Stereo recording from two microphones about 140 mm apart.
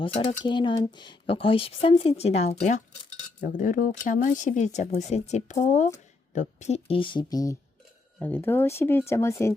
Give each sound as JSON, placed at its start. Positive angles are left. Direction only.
{"t": 0.0, "sound": "speech", "side_deg": 40}
{"t": 3.4, "sound": "speech", "side_deg": 70}
{"t": 8.2, "sound": "speech", "side_deg": 15}